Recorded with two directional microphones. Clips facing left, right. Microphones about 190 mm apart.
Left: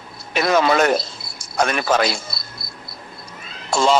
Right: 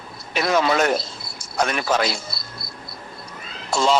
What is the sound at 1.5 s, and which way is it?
Speech, 80° left.